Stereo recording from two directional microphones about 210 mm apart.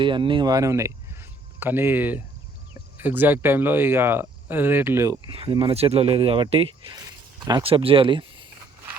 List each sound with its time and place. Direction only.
0.0 s speech: 25° right (ahead or behind)
5.3 s speech: 25° right (ahead or behind)